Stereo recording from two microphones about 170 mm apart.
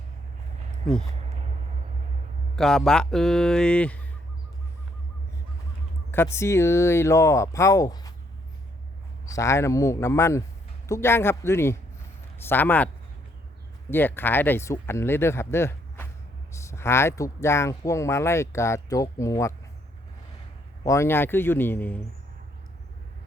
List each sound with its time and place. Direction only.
2.6 s speech: 5° left (ahead or behind)
6.3 s speech: 15° left (ahead or behind)
9.2 s speech: 20° left (ahead or behind)
13.9 s speech: 10° left (ahead or behind)
20.8 s speech: 15° left (ahead or behind)